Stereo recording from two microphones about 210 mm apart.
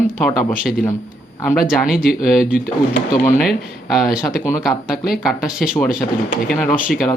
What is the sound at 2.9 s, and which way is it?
Speech, 35° left (ahead or behind).